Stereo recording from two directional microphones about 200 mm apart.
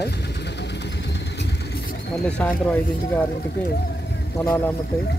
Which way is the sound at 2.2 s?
5° left (ahead or behind).